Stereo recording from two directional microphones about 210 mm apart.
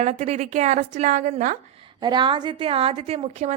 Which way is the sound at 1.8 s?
20° right (ahead or behind).